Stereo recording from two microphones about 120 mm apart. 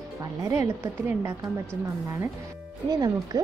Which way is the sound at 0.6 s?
20° right (ahead or behind).